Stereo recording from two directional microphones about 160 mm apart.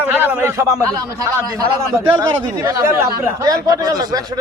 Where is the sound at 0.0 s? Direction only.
10° right (ahead or behind).